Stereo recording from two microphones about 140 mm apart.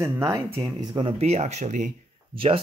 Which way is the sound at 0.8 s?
35° right (ahead or behind).